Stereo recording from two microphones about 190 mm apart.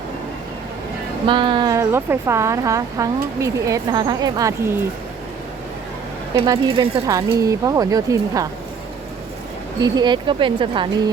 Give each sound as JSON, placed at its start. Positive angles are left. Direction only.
{"t": 1.3, "sound": "speech", "side_deg": -25}
{"t": 6.4, "sound": "speech", "side_deg": -20}
{"t": 9.8, "sound": "speech", "side_deg": -20}